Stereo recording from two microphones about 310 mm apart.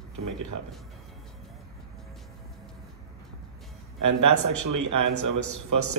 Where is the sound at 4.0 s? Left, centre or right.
Right.